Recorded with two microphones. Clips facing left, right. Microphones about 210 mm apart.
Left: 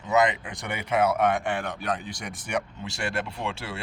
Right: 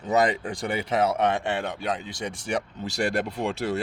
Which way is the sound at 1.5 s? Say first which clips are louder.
Right 1 dB; 25° right (ahead or behind).